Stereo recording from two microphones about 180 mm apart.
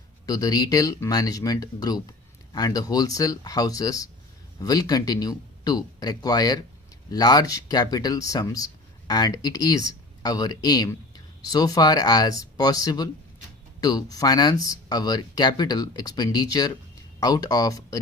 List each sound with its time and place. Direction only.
0.3 s speech: 20° left (ahead or behind)